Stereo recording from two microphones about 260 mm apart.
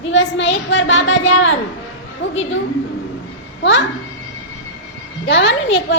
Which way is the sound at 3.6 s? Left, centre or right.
Left.